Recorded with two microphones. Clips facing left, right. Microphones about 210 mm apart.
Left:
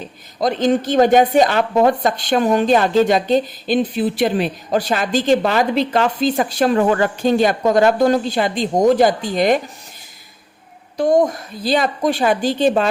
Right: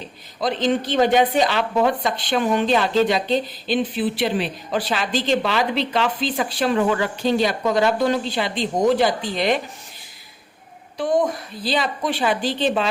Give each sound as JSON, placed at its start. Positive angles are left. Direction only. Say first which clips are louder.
{"t": 0.3, "sound": "a woman's voice", "louder": "left 4 dB", "side_deg": 45}
{"t": 10.9, "sound": "a woman's voice", "louder": "left 5 dB", "side_deg": 40}